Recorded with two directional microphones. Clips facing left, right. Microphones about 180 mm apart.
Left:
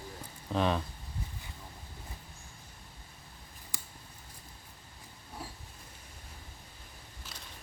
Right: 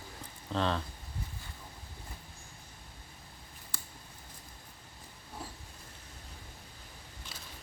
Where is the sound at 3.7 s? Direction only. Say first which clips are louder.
Left 1 dB; 15° left (ahead or behind).